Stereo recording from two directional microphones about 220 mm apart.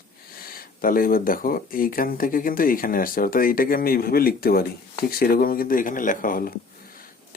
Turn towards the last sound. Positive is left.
turn(degrees=40)  # may be behind; listen again after turning